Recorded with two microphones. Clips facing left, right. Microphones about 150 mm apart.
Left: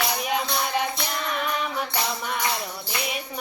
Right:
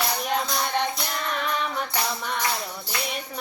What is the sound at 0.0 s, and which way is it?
Music, 5° left (ahead or behind).